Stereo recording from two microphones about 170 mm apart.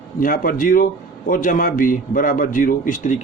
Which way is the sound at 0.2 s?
55° left (ahead or behind).